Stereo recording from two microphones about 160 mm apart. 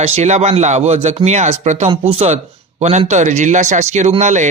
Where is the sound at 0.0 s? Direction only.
45° right (ahead or behind).